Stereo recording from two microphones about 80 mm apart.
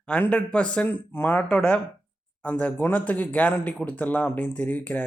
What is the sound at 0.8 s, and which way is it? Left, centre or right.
Speech, left.